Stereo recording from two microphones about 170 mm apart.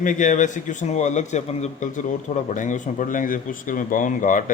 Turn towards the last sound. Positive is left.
turn(degrees=50)  # may be behind; listen again after turning